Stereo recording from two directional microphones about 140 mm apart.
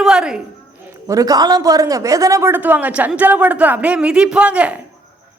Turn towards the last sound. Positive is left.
turn(degrees=-10)  # may be behind; listen again after turning